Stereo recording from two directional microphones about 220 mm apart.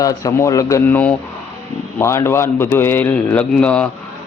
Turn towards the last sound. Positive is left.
turn(degrees=5)  # may be behind; listen again after turning